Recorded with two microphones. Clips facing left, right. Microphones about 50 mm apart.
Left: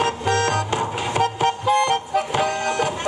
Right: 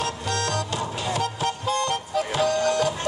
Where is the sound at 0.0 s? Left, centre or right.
Left.